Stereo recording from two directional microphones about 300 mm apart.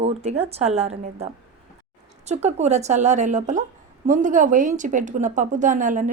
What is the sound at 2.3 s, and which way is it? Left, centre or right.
Speech, right.